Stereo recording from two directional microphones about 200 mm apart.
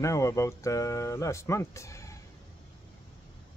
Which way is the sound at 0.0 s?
15° left (ahead or behind).